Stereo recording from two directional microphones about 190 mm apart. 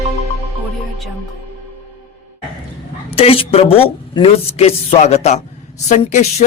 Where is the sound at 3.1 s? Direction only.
30° left (ahead or behind).